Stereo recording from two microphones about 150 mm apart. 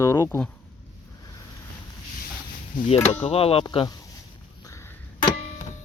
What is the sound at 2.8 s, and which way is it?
Speech, 55° left (ahead or behind).